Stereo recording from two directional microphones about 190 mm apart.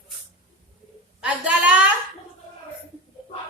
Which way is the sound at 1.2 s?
5° right (ahead or behind).